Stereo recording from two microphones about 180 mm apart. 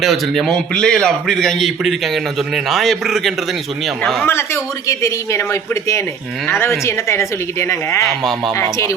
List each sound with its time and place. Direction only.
0.0 s a man's voice: centre (ahead or behind)
4.3 s speech: 15° left (ahead or behind)